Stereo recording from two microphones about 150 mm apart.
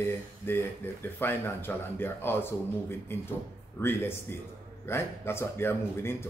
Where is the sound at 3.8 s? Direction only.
15° left (ahead or behind).